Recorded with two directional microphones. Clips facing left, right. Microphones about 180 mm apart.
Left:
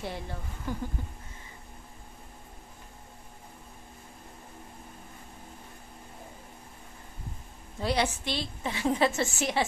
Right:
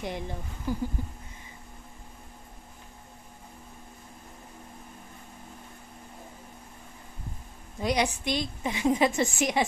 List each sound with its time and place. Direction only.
0.0 s a woman's voice: 15° right (ahead or behind)
7.8 s a woman's voice: 15° right (ahead or behind)